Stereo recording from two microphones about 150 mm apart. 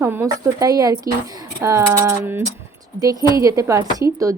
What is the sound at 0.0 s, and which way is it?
Speech, 15° right (ahead or behind).